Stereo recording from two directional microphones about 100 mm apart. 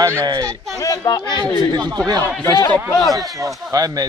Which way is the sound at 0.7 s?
40° left (ahead or behind).